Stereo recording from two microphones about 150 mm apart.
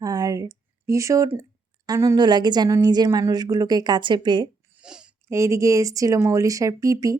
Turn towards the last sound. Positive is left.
turn(degrees=-20)  # may be behind; listen again after turning